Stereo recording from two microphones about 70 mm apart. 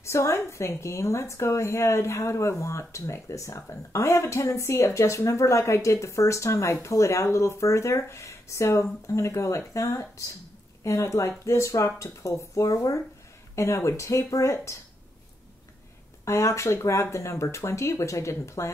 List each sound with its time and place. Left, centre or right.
0.0 s a woman's voice: left
16.3 s a woman's voice: left